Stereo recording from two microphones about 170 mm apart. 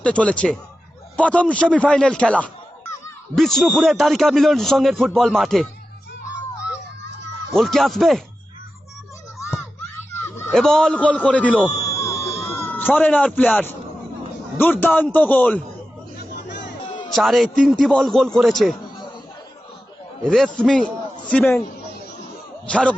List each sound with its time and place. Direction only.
0.0 s a man's voice: 10° left (ahead or behind)
7.5 s a man's voice: centre (ahead or behind)
10.2 s fowl: 15° left (ahead or behind)
10.5 s a man's voice: 5° left (ahead or behind)
11.9 s a sound: 20° left (ahead or behind)
12.3 s a man's voice: 15° left (ahead or behind)
16.1 s a sound: 90° left
16.9 s a sound: 25° left (ahead or behind)
17.2 s a man's voice: centre (ahead or behind)
20.3 s a man's voice: centre (ahead or behind)
22.6 s a man's voice: 5° left (ahead or behind)